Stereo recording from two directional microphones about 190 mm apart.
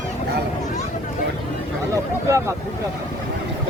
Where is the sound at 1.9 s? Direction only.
15° right (ahead or behind).